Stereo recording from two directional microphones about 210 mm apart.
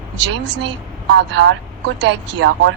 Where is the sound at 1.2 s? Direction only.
55° right (ahead or behind).